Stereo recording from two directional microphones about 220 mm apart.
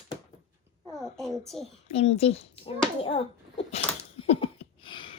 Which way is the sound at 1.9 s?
30° left (ahead or behind).